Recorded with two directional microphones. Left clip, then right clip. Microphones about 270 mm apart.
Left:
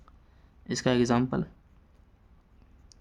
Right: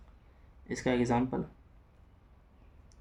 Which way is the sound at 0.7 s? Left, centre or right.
Left.